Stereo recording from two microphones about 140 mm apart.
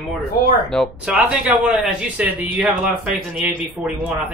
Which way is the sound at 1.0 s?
10° right (ahead or behind).